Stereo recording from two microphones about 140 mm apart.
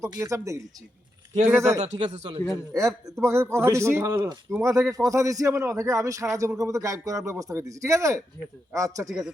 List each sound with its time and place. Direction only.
0.0 s a man's voice: 25° right (ahead or behind)
1.8 s speech: 50° right (ahead or behind)
2.7 s a man's voice: 20° right (ahead or behind)
9.0 s speech: 5° right (ahead or behind)